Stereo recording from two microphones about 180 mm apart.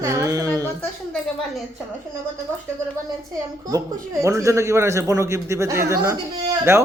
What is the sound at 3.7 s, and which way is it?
A man's voice, 15° right (ahead or behind).